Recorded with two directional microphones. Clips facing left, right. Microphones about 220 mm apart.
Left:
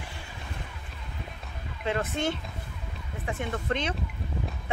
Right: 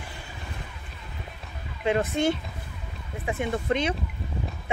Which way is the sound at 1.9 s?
10° right (ahead or behind).